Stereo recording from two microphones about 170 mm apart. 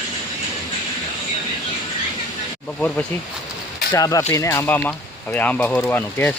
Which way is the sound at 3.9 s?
20° left (ahead or behind).